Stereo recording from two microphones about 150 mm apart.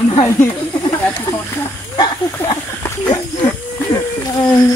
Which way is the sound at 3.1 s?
30° left (ahead or behind).